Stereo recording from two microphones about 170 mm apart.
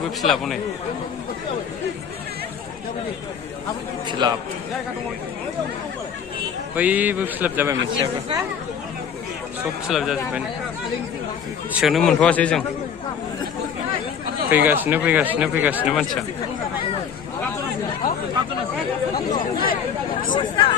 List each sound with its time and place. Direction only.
0.2 s speech: centre (ahead or behind)
4.1 s speech: 25° right (ahead or behind)
6.7 s speech: 10° right (ahead or behind)
7.9 s speech: 25° right (ahead or behind)
9.9 s speech: centre (ahead or behind)
11.7 s speech: centre (ahead or behind)
14.5 s speech: 10° right (ahead or behind)
20.3 s speech: 25° left (ahead or behind)